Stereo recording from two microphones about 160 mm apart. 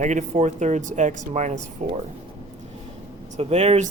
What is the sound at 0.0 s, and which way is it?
Speech, 50° right (ahead or behind).